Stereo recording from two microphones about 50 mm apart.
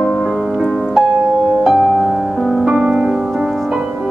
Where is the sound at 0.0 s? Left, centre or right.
Centre.